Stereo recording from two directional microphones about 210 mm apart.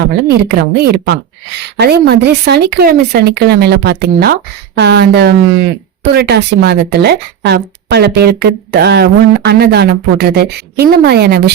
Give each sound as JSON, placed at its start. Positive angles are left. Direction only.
{"t": 0.3, "sound": "a woman's voice", "side_deg": -50}